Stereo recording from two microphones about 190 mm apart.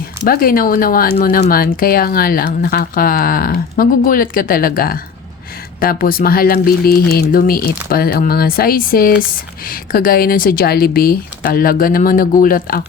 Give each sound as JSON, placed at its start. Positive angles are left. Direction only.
{"t": 0.3, "sound": "speech", "side_deg": 50}